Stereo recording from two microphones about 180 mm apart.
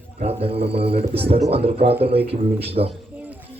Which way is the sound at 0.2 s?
35° right (ahead or behind).